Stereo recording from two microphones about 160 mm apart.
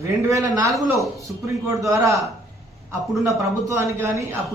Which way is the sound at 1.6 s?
20° right (ahead or behind).